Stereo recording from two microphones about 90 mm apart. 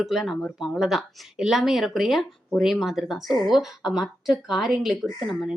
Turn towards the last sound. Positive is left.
turn(degrees=0)  # may be behind; listen again after turning